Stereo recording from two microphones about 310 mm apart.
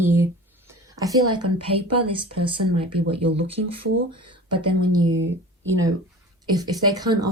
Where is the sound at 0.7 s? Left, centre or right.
Centre.